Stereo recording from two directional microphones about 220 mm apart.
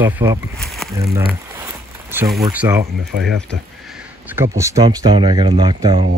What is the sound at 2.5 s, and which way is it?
Speech, 10° right (ahead or behind).